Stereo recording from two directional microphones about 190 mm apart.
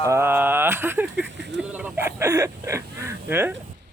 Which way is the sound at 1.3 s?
70° right (ahead or behind).